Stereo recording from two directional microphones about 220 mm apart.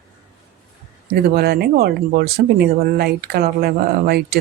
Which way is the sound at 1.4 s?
45° right (ahead or behind).